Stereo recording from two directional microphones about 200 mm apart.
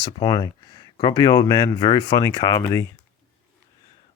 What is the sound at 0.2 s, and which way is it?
Speech, 20° left (ahead or behind).